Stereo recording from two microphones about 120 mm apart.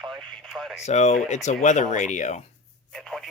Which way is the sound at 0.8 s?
70° left (ahead or behind).